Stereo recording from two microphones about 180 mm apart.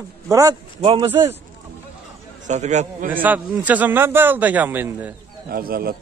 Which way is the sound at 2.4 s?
40° right (ahead or behind).